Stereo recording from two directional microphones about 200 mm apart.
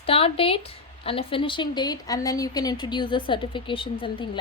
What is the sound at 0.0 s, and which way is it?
Speech, 30° left (ahead or behind).